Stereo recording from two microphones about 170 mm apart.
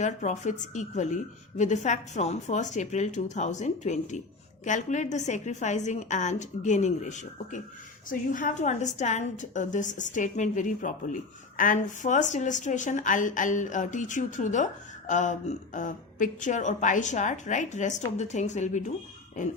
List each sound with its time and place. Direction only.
0.0 s a woman's voice: 45° left (ahead or behind)